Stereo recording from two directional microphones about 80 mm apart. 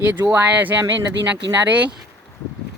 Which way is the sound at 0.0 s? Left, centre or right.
Right.